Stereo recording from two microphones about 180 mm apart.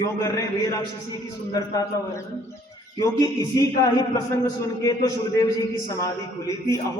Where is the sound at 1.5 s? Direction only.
15° left (ahead or behind).